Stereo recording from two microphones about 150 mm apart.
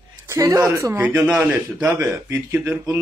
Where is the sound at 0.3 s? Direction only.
20° right (ahead or behind).